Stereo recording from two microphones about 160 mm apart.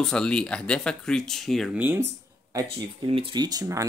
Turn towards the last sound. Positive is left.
turn(degrees=-20)  # may be behind; listen again after turning